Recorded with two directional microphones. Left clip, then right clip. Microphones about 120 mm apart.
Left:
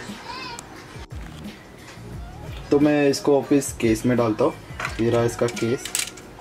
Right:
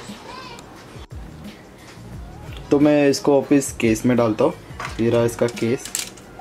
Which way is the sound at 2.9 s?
45° right (ahead or behind).